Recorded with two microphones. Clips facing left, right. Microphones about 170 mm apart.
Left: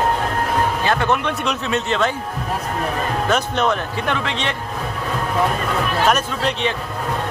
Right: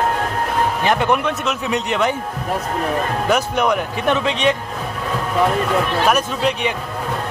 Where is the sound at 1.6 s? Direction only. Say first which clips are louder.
Right 1 dB; 15° right (ahead or behind).